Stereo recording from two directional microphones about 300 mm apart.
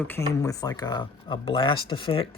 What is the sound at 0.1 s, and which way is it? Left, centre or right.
Speech, centre.